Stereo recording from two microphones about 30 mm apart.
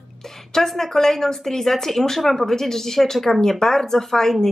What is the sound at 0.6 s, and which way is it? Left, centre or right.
Speech, centre.